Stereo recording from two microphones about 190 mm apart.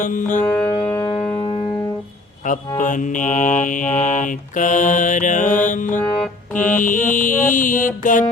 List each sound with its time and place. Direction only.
0.0 s mantra: 40° left (ahead or behind)
0.4 s music: 10° left (ahead or behind)
2.5 s mantra: 45° left (ahead or behind)
6.0 s music: 5° left (ahead or behind)
6.7 s mantra: 45° left (ahead or behind)